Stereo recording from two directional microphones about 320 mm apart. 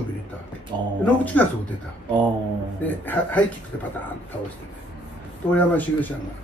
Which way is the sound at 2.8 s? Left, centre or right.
Centre.